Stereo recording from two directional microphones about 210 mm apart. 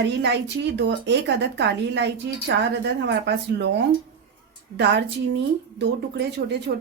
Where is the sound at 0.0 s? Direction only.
55° right (ahead or behind).